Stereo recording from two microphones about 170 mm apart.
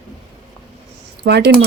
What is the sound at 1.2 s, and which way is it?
Speech, 75° right (ahead or behind).